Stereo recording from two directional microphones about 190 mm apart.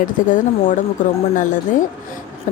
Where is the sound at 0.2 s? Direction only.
45° left (ahead or behind).